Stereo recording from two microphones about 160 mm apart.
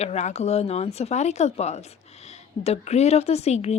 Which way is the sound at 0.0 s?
45° left (ahead or behind).